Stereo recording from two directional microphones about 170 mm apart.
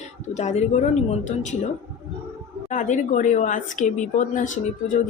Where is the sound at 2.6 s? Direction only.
45° left (ahead or behind).